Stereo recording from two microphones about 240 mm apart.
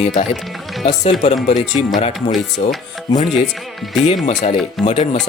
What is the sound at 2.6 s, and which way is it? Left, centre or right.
Speech, left.